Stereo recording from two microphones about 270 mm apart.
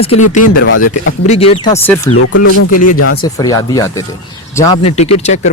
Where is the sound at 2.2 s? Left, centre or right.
Left.